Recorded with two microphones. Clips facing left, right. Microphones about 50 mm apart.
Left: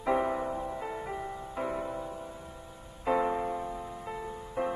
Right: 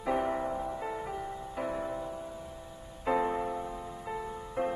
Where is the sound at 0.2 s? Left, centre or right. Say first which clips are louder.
Left 1 dB; centre.